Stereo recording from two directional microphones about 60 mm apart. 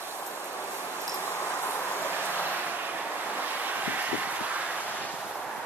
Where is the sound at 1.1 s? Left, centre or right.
Left.